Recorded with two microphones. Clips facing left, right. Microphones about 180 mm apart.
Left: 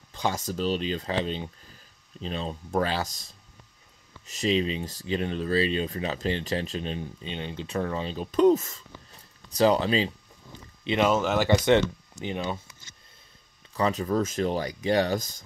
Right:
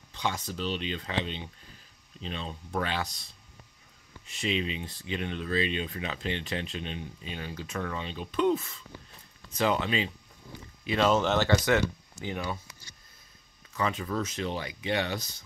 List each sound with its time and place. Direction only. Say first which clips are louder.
0.1 s speech: left 4 dB; 45° left (ahead or behind)
4.3 s speech: left 6 dB; 40° left (ahead or behind)
7.3 s speech: left 5 dB; 25° left (ahead or behind)
10.8 s a sound: left 3 dB; 25° left (ahead or behind)
11.1 s speech: even; 5° left (ahead or behind)
13.7 s speech: left 5 dB; 35° left (ahead or behind)